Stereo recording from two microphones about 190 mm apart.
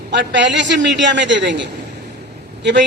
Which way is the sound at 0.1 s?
70° right (ahead or behind).